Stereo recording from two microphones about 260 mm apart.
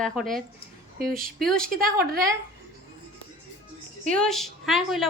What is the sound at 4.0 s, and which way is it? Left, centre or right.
Speech, centre.